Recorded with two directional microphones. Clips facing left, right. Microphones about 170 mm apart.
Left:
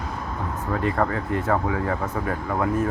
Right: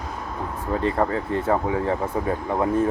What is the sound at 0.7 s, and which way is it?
Speech, 25° right (ahead or behind).